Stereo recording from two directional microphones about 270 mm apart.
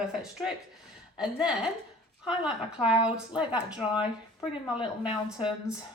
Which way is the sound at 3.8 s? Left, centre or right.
Centre.